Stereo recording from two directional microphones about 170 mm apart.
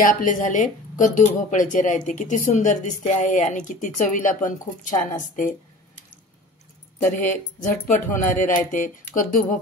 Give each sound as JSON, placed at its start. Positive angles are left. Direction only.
{"t": 0.0, "sound": "speech", "side_deg": 50}
{"t": 7.8, "sound": "speech", "side_deg": 50}